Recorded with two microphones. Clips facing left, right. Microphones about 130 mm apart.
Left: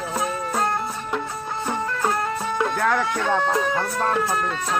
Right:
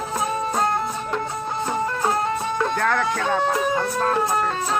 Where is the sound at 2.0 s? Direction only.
25° right (ahead or behind).